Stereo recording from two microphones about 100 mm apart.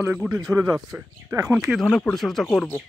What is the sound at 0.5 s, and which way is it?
Speech, 30° right (ahead or behind).